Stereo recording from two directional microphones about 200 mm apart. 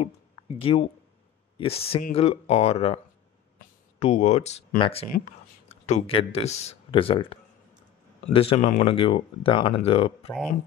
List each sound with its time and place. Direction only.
0.6 s speech: 30° left (ahead or behind)
4.0 s speech: 35° left (ahead or behind)